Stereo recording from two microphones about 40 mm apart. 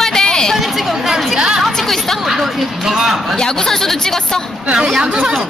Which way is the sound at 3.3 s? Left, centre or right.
Centre.